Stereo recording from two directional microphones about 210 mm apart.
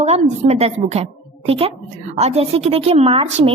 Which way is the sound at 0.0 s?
30° right (ahead or behind).